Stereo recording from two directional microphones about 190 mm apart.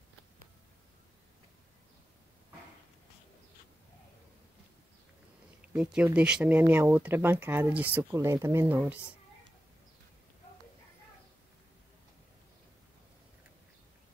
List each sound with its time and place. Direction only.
5.6 s speech: 5° right (ahead or behind)